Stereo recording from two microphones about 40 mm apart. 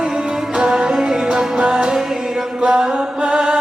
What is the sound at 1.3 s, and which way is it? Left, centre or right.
Music, right.